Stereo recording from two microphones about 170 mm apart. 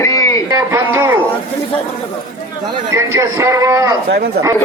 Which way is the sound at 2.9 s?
15° right (ahead or behind).